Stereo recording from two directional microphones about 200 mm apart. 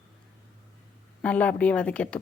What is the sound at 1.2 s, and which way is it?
Speech, 5° left (ahead or behind).